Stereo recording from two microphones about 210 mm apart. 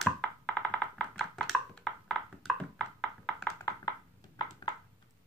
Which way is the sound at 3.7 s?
15° left (ahead or behind).